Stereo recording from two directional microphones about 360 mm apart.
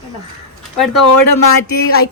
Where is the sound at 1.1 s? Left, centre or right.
Left.